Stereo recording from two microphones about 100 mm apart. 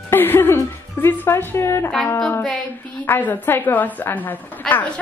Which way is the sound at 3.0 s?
20° left (ahead or behind).